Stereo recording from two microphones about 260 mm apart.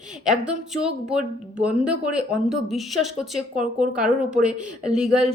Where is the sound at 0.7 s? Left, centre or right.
Centre.